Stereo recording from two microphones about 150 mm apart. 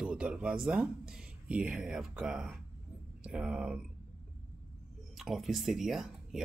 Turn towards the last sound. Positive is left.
turn(degrees=-5)  # may be behind; listen again after turning